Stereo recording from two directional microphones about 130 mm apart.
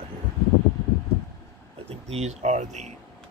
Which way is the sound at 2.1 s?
60° right (ahead or behind).